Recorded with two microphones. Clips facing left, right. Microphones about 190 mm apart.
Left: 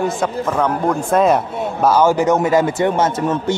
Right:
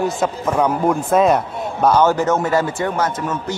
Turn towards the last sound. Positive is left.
turn(degrees=30)  # may be behind; listen again after turning